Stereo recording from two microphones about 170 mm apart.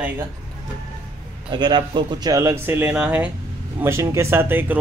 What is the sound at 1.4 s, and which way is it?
A man's voice, 25° right (ahead or behind).